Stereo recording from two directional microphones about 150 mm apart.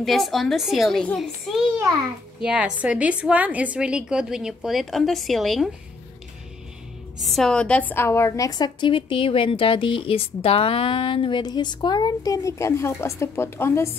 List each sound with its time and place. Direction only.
0.0 s a child's voice: centre (ahead or behind)
7.2 s a woman's voice: centre (ahead or behind); by 13.9 s 15° left (ahead or behind)